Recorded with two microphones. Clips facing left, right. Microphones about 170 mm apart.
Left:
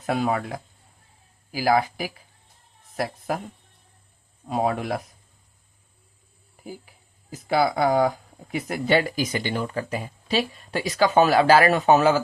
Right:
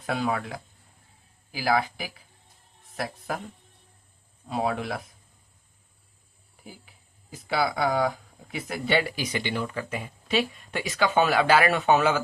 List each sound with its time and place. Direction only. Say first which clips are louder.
0.2 s speech: left 2 dB; 45° left (ahead or behind)
1.5 s speech: left 4 dB; 40° left (ahead or behind)
4.4 s speech: left 3 dB; 45° left (ahead or behind)
7.3 s speech: left 5 dB; 40° left (ahead or behind)